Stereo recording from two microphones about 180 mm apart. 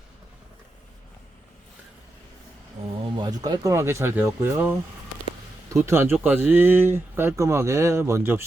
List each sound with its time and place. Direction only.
2.8 s a sound: 35° right (ahead or behind)
3.2 s speech: 25° right (ahead or behind)
5.7 s speech: 15° right (ahead or behind)